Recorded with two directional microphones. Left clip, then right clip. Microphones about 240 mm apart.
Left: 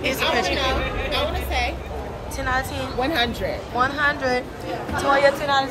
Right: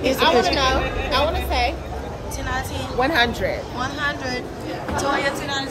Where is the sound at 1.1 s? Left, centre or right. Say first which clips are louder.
Right 5 dB; right.